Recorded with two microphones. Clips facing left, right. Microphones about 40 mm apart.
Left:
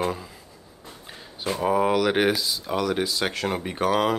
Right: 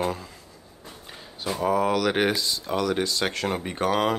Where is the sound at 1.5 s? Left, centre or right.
Centre.